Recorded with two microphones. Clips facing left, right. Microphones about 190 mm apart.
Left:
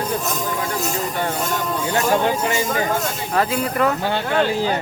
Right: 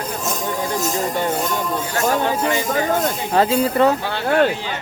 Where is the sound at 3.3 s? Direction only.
30° right (ahead or behind).